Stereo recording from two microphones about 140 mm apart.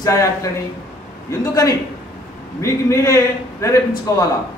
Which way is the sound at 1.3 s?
25° left (ahead or behind).